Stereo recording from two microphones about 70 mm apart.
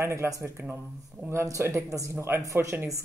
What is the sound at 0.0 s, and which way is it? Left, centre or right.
Speech, right.